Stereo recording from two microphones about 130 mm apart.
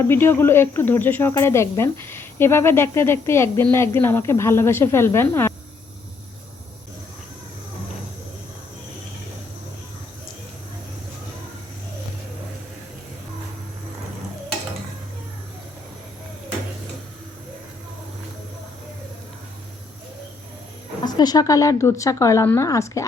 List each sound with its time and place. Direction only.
0.1 s speech: 15° left (ahead or behind)
21.0 s speech: 30° left (ahead or behind)